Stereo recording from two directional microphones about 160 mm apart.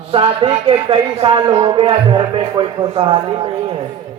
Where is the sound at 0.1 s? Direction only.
35° right (ahead or behind).